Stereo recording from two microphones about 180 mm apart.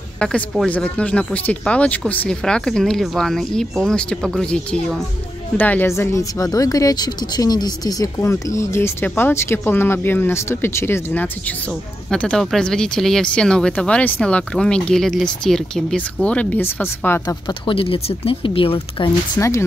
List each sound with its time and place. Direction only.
0.2 s speech: 5° left (ahead or behind)
17.5 s speech: 30° left (ahead or behind)
19.3 s speech: 15° left (ahead or behind)